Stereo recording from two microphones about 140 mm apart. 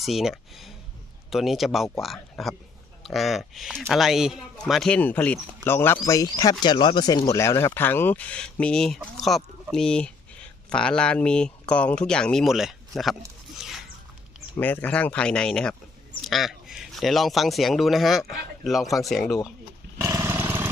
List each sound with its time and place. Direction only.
0.0 s speech: centre (ahead or behind)
14.6 s speech: 10° left (ahead or behind)
20.0 s roaring cats: 20° right (ahead or behind)